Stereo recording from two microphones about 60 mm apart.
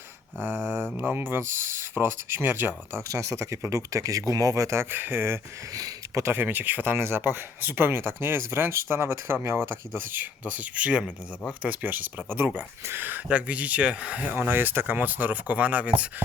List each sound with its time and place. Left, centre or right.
0.3 s speech: right
3.1 s speech: right
4.8 s speech: right
5.7 s a sound: right
6.3 s speech: right
13.2 s speech: right
14.3 s speech: right